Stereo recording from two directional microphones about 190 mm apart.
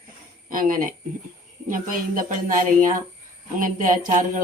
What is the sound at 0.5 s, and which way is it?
Speech, 45° right (ahead or behind).